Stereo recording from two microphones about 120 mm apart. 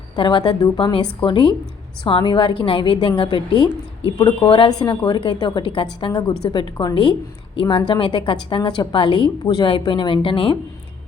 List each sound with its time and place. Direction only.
0.2 s a woman's voice: 40° left (ahead or behind)